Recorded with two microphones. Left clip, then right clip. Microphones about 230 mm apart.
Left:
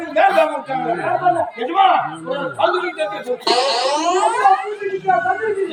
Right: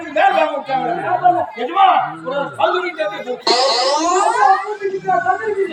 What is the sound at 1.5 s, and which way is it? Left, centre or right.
A man's voice, centre.